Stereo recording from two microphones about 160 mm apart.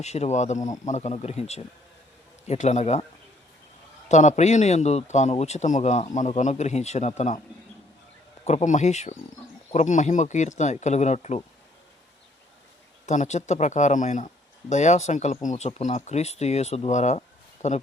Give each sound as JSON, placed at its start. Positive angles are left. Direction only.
{"t": 0.0, "sound": "speech", "side_deg": 45}
{"t": 4.1, "sound": "speech", "side_deg": 50}
{"t": 8.4, "sound": "speech", "side_deg": 45}
{"t": 13.1, "sound": "speech", "side_deg": 45}